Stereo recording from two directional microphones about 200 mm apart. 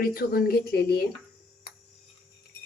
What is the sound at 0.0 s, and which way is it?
Speech, 45° left (ahead or behind).